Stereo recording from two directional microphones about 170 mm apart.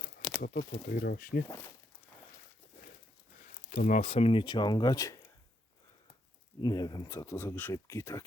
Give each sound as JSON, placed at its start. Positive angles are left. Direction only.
{"t": 0.3, "sound": "speech", "side_deg": 55}
{"t": 1.5, "sound": "speech", "side_deg": 15}
{"t": 3.7, "sound": "speech", "side_deg": 50}
{"t": 6.6, "sound": "speech", "side_deg": 20}